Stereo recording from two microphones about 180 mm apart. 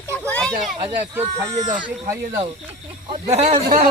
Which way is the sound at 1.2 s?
20° right (ahead or behind).